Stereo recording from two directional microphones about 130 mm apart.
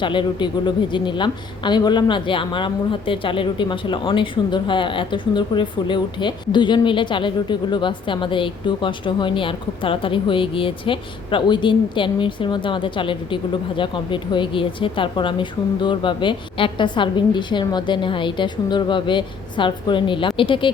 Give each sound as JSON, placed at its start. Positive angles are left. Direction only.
{"t": 0.0, "sound": "a woman's voice", "side_deg": 40}